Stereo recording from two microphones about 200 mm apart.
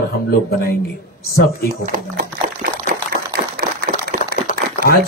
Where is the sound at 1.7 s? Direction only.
50° right (ahead or behind).